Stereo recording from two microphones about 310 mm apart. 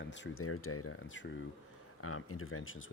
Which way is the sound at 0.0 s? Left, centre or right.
Left.